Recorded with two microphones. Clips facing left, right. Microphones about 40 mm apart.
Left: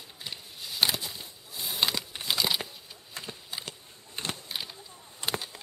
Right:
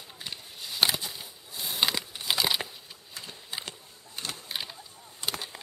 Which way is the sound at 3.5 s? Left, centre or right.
Centre.